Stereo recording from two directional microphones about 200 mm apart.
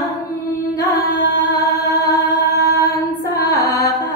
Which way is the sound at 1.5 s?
15° left (ahead or behind).